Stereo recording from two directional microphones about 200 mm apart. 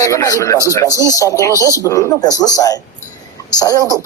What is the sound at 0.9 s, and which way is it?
Speech, 15° right (ahead or behind).